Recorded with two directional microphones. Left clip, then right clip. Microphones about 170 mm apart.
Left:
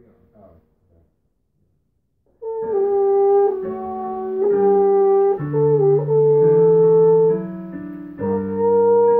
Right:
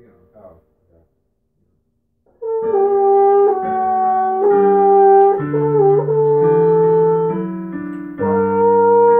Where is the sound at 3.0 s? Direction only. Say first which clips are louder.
Right 5 dB; 5° right (ahead or behind).